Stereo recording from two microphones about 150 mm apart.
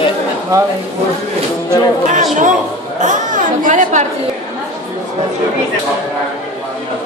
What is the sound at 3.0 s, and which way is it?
Chatter, 60° right (ahead or behind).